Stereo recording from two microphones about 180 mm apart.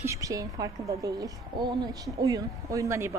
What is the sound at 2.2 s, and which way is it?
Speech, 20° right (ahead or behind).